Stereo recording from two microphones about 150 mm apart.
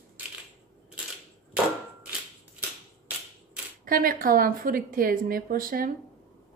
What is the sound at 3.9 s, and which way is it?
A woman's voice, 70° right (ahead or behind).